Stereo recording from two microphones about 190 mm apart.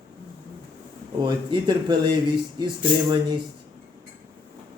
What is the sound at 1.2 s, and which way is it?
Speech, 25° right (ahead or behind).